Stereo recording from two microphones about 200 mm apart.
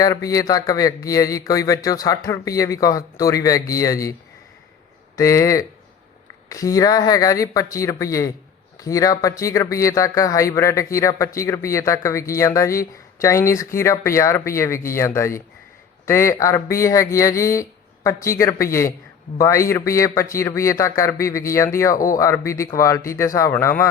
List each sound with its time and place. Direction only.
0.0 s speech: 15° left (ahead or behind)
5.1 s speech: 15° left (ahead or behind)